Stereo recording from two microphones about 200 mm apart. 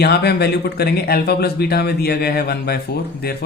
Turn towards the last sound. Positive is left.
turn(degrees=50)  # may be behind; listen again after turning